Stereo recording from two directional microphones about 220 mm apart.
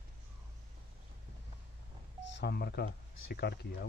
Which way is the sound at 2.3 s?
50° left (ahead or behind).